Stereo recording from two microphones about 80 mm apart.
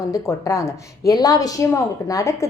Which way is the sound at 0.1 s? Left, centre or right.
Left.